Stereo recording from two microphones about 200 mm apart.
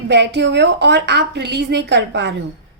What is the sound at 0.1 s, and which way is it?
A woman's voice, 60° right (ahead or behind).